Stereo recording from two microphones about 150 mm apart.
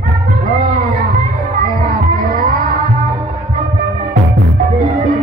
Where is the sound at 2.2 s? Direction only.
75° right (ahead or behind).